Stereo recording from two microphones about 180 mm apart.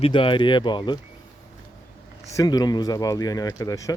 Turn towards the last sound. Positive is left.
turn(degrees=20)  # may be behind; listen again after turning